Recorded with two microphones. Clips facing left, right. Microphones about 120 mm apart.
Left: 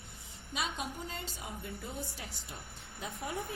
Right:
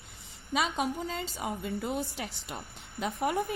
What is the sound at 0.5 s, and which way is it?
A woman's voice, 90° right.